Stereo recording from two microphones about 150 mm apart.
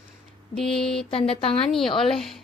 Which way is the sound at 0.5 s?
Centre (ahead or behind).